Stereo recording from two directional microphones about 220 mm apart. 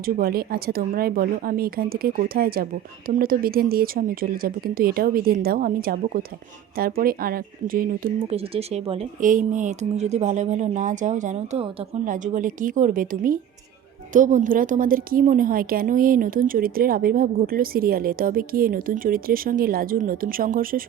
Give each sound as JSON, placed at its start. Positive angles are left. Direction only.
{"t": 0.0, "sound": "a woman's voice", "side_deg": -40}
{"t": 8.3, "sound": "a woman's voice", "side_deg": -30}